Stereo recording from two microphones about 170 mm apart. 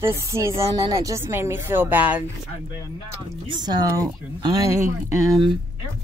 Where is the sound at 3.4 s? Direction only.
25° right (ahead or behind).